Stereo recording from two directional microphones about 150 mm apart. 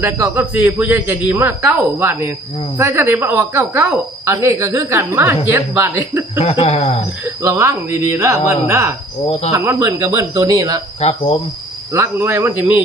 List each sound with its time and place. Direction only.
0.0 s speech: 15° right (ahead or behind)
6.4 s speech: 45° left (ahead or behind)
7.4 s speech: 20° right (ahead or behind)
9.2 s speech: 40° left (ahead or behind)
9.5 s speech: 20° right (ahead or behind)
11.0 s speech: 45° left (ahead or behind)
11.9 s speech: 20° right (ahead or behind)